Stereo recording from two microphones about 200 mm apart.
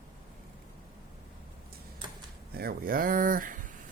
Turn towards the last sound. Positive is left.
turn(degrees=-45)  # may be behind; listen again after turning